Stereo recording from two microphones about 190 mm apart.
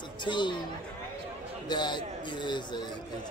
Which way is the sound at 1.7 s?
25° left (ahead or behind).